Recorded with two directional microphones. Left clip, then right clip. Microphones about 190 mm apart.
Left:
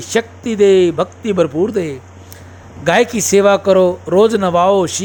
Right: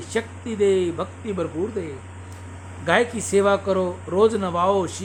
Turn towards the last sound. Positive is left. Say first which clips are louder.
# left 9 dB
turn(degrees=35)  # may be behind; listen again after turning